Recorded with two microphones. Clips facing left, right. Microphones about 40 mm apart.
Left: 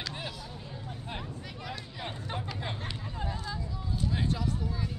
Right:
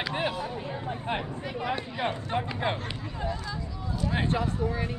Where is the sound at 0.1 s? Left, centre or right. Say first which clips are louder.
Right 10 dB; right.